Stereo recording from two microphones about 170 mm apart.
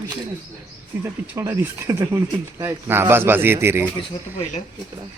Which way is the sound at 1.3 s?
15° right (ahead or behind).